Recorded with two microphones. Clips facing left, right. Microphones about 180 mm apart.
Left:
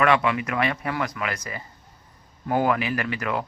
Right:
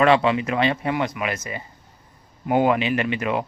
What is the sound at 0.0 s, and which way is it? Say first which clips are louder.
Speech: right 4 dB; 30° right (ahead or behind).